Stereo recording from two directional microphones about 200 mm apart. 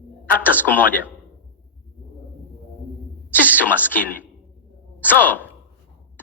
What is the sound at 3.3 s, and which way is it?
Speech, 10° left (ahead or behind).